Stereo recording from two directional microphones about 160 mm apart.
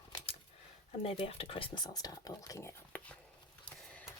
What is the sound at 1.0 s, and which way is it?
Speech, 35° left (ahead or behind).